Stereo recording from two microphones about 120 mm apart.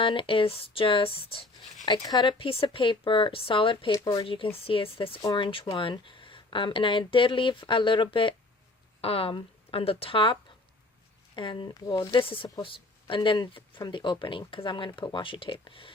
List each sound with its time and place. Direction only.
0.0 s speech: 45° left (ahead or behind)
1.8 s speech: 35° left (ahead or behind)
3.9 s speech: 30° left (ahead or behind)
4.3 s speech: 50° left (ahead or behind)
11.3 s speech: 40° left (ahead or behind)